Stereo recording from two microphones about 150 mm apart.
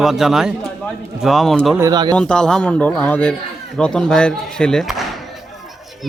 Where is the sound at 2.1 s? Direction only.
5° left (ahead or behind).